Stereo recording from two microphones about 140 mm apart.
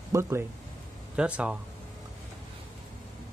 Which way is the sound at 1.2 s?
10° right (ahead or behind).